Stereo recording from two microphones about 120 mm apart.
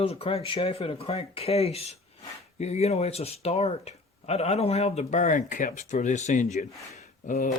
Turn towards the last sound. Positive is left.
turn(degrees=90)